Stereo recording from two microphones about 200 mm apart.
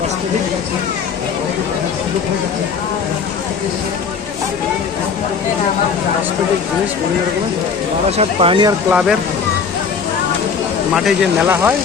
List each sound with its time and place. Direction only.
8.2 s speech: 25° right (ahead or behind)
8.9 s speech: 5° right (ahead or behind)
11.4 s speech: 10° right (ahead or behind)